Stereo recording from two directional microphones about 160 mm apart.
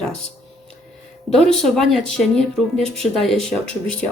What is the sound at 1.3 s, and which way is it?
Speech, centre (ahead or behind).